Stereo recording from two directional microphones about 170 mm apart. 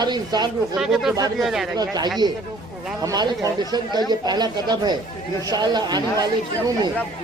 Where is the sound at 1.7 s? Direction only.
20° right (ahead or behind).